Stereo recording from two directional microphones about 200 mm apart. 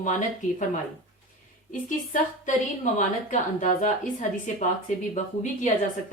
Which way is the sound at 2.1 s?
40° left (ahead or behind).